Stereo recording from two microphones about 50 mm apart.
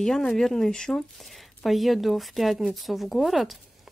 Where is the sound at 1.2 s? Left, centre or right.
Centre.